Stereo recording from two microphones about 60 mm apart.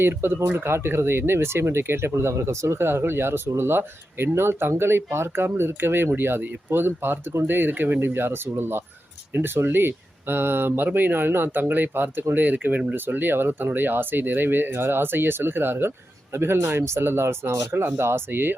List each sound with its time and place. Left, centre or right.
0.0 s speech: right
17.7 s speech: right